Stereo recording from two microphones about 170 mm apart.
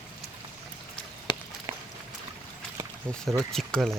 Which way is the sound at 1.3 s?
25° left (ahead or behind).